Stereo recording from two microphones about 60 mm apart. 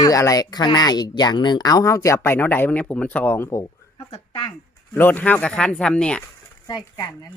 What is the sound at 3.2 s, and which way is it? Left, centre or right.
Speech, left.